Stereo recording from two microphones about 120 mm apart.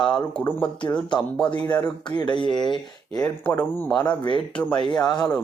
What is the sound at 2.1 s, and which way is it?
Speech, 40° left (ahead or behind).